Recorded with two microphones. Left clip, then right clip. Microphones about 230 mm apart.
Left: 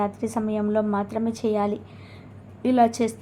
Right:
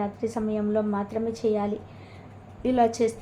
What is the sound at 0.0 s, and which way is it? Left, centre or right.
A woman's voice, left.